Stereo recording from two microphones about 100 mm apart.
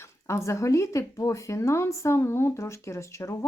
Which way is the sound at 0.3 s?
30° left (ahead or behind).